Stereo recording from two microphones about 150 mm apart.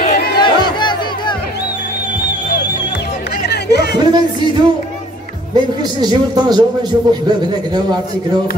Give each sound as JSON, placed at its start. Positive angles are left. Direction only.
{"t": 0.0, "sound": "crowd", "side_deg": 90}
{"t": 0.4, "sound": "crowd", "side_deg": 30}
{"t": 3.4, "sound": "music", "side_deg": 90}
{"t": 4.0, "sound": "a sound", "side_deg": -30}
{"t": 5.9, "sound": "a man's voice", "side_deg": -30}